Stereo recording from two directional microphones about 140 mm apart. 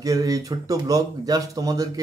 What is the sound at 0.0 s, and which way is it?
Speech, 25° right (ahead or behind).